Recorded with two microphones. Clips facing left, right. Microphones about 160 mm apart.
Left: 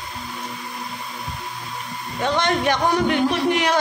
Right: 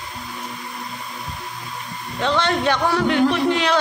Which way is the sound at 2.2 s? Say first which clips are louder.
Right 1 dB; 15° left (ahead or behind).